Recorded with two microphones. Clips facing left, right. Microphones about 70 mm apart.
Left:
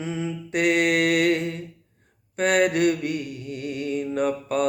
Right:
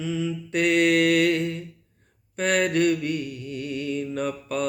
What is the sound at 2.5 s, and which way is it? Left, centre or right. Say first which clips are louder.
Mantra: left 1 dB; left.